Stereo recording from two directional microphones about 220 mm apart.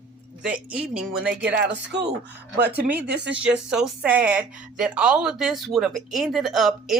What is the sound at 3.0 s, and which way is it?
Speech, 50° right (ahead or behind).